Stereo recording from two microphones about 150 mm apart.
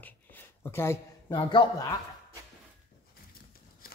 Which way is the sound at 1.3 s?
35° left (ahead or behind).